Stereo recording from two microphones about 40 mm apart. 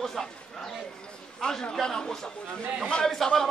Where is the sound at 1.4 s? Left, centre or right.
Left.